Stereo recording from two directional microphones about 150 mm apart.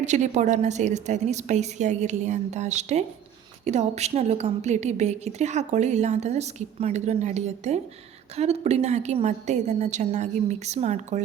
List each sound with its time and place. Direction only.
0.0 s a woman's voice: 50° right (ahead or behind)